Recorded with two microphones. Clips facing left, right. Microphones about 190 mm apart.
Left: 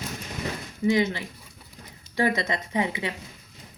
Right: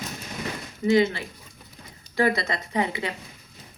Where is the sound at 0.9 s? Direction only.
15° left (ahead or behind).